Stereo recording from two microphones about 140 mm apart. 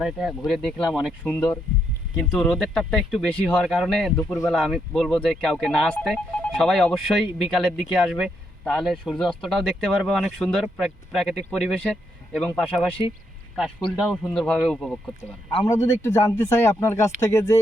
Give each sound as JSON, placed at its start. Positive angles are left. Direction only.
{"t": 0.0, "sound": "speech", "side_deg": 0}
{"t": 13.9, "sound": "speech", "side_deg": 0}
{"t": 15.6, "sound": "speech", "side_deg": 20}